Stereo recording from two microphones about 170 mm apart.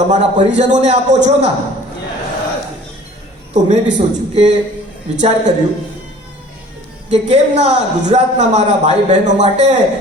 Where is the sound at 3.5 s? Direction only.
40° right (ahead or behind).